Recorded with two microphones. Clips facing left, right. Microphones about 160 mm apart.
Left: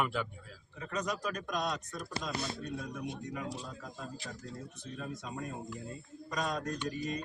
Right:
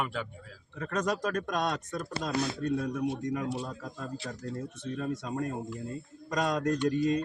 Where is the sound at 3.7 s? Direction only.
55° right (ahead or behind).